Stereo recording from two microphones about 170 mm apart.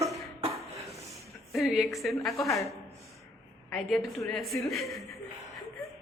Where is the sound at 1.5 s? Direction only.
Centre (ahead or behind).